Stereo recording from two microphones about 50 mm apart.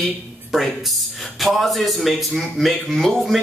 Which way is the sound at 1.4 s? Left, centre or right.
Centre.